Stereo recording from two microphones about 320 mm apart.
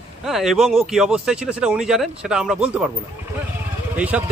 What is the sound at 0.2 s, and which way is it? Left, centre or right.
Speech, centre.